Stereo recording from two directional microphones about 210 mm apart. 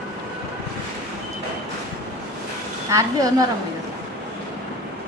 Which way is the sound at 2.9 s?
15° right (ahead or behind).